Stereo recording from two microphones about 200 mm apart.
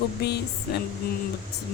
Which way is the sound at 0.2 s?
55° left (ahead or behind).